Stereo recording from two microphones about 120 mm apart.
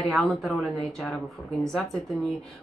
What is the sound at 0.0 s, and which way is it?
Speech, centre (ahead or behind).